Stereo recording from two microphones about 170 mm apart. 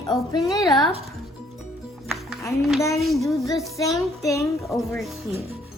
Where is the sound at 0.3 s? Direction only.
20° left (ahead or behind).